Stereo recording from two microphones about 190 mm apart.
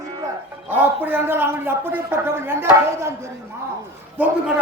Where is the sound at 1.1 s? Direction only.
10° right (ahead or behind).